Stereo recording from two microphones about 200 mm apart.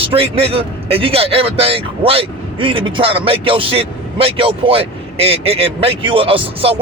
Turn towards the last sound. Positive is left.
turn(degrees=-30)  # may be behind; listen again after turning